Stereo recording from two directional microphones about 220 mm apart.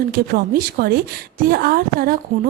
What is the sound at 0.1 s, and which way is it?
A woman's voice, 40° right (ahead or behind).